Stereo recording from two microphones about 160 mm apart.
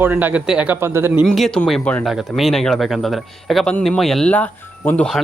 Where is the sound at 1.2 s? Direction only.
Centre (ahead or behind).